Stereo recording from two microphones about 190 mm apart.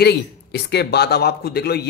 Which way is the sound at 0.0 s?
60° left (ahead or behind).